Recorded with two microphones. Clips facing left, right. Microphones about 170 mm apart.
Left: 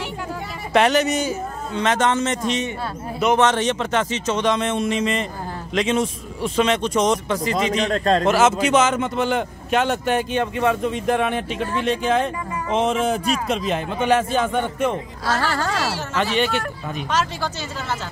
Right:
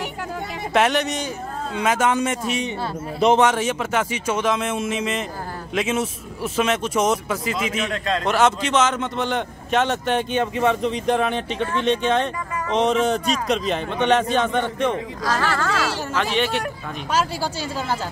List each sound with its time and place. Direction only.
0.7 s a man's voice: centre (ahead or behind)
1.8 s a man's voice: 10° right (ahead or behind)
7.7 s a man's voice: 40° left (ahead or behind)
8.3 s a man's voice: 5° left (ahead or behind)
15.4 s speech: 35° left (ahead or behind)
16.2 s a man's voice: centre (ahead or behind)